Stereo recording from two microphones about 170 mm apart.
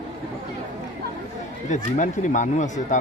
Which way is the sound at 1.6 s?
45° left (ahead or behind).